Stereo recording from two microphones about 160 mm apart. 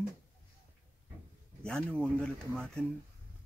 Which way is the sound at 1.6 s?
5° left (ahead or behind).